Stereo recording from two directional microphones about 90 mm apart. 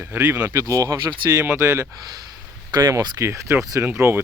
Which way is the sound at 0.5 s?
40° right (ahead or behind).